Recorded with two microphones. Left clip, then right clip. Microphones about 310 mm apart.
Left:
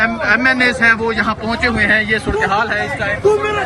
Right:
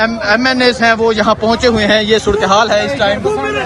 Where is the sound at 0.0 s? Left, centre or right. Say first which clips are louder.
Right 1 dB; centre.